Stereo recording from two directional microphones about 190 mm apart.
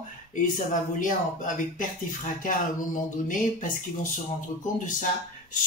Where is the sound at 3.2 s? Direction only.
45° left (ahead or behind).